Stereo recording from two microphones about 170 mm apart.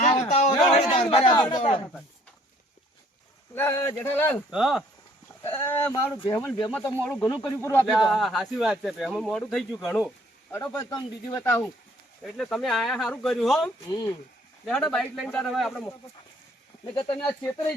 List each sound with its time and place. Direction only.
0.0 s a sound: 45° left (ahead or behind)
0.7 s speech: 45° left (ahead or behind)
3.5 s speech: 15° left (ahead or behind)
4.5 s speech: centre (ahead or behind)
5.4 s speech: 15° left (ahead or behind)
7.9 s speech: centre (ahead or behind)
10.5 s speech: 15° left (ahead or behind)
12.2 s speech: centre (ahead or behind)
13.9 s speech: 25° left (ahead or behind)
14.7 s speech: 5° left (ahead or behind)
16.9 s speech: 25° left (ahead or behind)